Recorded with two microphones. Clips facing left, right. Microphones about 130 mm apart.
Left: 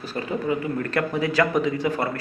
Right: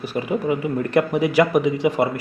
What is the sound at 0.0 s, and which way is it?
Speech, 15° right (ahead or behind).